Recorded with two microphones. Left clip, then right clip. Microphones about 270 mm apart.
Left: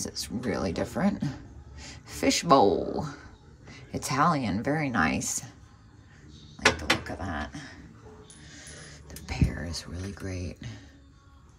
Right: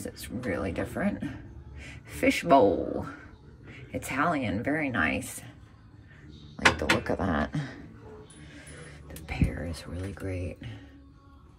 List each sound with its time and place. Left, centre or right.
0.0 s a woman's voice: centre
6.8 s a sound: centre
9.0 s whispering: centre